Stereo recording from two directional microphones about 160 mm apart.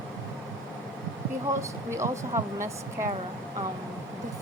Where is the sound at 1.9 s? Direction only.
15° right (ahead or behind).